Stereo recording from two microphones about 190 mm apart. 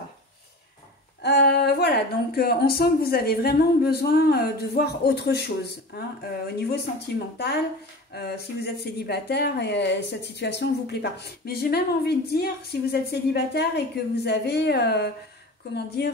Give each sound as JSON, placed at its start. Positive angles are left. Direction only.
{"t": 1.2, "sound": "a woman's voice", "side_deg": 55}